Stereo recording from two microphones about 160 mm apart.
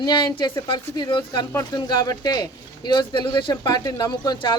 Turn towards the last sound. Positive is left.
turn(degrees=25)  # may be behind; listen again after turning